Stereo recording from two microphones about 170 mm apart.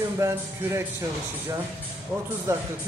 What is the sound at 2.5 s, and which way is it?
Speech, 20° right (ahead or behind).